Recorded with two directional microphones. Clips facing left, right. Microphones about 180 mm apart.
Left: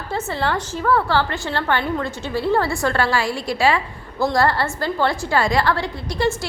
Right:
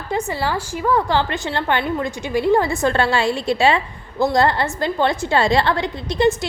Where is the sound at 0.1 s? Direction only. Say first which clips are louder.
Right 1 dB; 15° right (ahead or behind).